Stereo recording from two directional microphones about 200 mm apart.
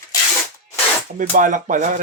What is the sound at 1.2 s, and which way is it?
Speech, 40° right (ahead or behind).